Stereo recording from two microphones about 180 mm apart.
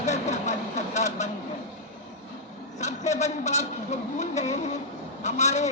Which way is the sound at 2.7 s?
40° left (ahead or behind).